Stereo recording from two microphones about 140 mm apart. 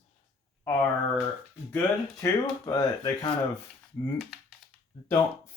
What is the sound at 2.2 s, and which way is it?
Speech, 20° left (ahead or behind).